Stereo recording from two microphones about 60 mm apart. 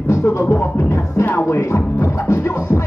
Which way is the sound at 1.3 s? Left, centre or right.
Left.